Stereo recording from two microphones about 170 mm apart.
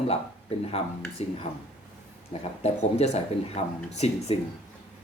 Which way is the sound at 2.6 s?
40° left (ahead or behind).